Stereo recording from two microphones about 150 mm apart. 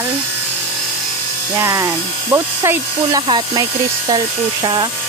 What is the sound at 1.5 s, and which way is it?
Speech, 20° right (ahead or behind).